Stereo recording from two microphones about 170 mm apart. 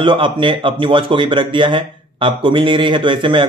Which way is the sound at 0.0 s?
30° right (ahead or behind).